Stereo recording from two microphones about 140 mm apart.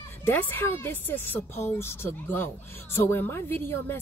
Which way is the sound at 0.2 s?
15° left (ahead or behind).